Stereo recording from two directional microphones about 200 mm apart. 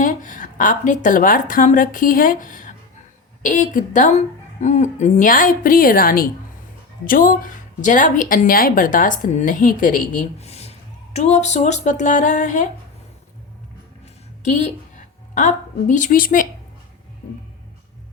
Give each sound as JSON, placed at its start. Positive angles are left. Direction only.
{"t": 0.0, "sound": "a woman's voice", "side_deg": 40}
{"t": 14.4, "sound": "a woman's voice", "side_deg": 35}